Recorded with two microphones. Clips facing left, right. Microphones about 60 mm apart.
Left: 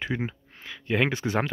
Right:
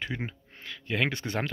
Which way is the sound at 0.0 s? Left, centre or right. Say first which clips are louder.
Left 5 dB; centre.